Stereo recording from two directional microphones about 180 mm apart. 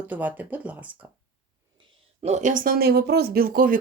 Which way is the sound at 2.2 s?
40° right (ahead or behind).